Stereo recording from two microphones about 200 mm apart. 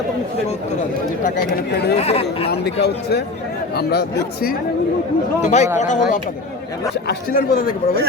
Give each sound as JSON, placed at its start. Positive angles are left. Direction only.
{"t": 1.7, "sound": "speech", "side_deg": 55}
{"t": 2.0, "sound": "speech", "side_deg": 30}
{"t": 2.8, "sound": "speech", "side_deg": 55}
{"t": 5.4, "sound": "speech", "side_deg": 35}